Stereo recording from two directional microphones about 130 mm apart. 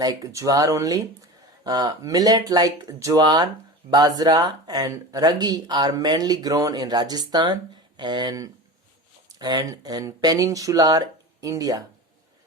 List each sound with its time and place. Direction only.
0.0 s speech: 30° right (ahead or behind)